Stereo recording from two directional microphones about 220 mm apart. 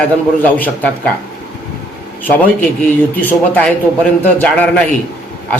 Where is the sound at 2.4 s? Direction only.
10° left (ahead or behind).